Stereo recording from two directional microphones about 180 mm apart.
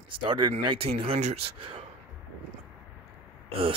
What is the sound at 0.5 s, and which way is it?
Speech, 35° right (ahead or behind).